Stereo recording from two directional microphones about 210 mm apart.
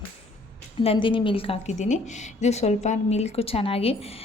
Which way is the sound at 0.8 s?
25° left (ahead or behind).